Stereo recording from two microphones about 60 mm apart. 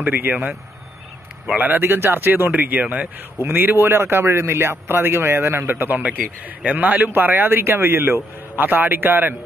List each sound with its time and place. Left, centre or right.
0.0 s speech: right
1.5 s speech: right
1.8 s a man's voice: right
3.4 s a man's voice: right